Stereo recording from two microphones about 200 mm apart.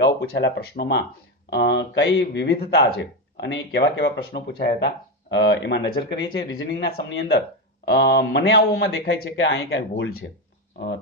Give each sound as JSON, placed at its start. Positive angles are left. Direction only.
{"t": 0.0, "sound": "speech", "side_deg": 60}